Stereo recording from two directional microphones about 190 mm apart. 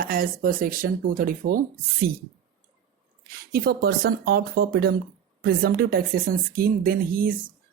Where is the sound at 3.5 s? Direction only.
55° right (ahead or behind).